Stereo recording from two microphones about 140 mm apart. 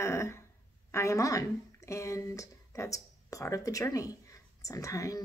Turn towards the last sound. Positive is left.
turn(degrees=25)  # may be behind; listen again after turning